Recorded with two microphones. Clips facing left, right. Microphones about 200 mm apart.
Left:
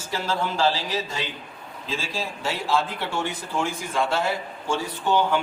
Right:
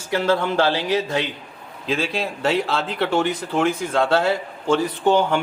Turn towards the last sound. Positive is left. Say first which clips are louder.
# right 4 dB
turn(degrees=-55)  # may be behind; listen again after turning